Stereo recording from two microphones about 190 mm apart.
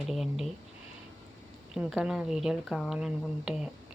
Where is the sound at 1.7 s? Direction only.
Centre (ahead or behind).